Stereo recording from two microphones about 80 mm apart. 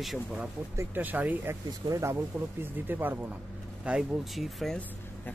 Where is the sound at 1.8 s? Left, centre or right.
Right.